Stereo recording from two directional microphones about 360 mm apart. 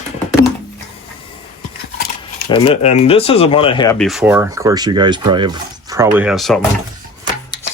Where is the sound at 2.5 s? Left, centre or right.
Centre.